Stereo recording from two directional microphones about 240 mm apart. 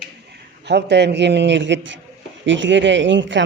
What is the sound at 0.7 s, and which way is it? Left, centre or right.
A woman's voice, right.